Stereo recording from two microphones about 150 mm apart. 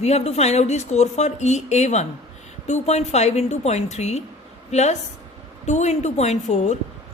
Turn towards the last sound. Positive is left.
turn(degrees=50)  # may be behind; listen again after turning